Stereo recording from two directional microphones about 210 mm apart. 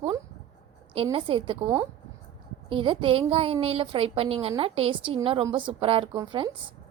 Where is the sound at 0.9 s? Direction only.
25° right (ahead or behind).